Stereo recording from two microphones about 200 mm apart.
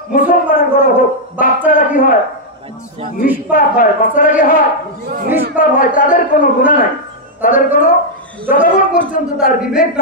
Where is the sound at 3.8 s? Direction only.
40° left (ahead or behind).